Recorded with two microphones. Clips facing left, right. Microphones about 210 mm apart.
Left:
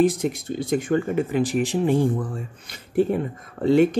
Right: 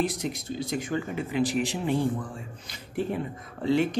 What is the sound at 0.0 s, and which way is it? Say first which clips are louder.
Speech: left 9 dB; 50° left (ahead or behind).